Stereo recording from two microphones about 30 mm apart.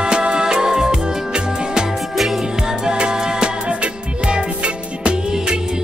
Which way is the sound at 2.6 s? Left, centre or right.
Right.